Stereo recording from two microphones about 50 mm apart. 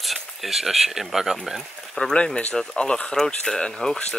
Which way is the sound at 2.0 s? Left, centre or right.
Centre.